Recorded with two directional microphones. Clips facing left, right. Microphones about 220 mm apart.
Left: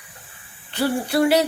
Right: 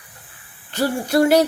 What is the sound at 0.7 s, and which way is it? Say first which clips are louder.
Speech: right 2 dB; 40° right (ahead or behind).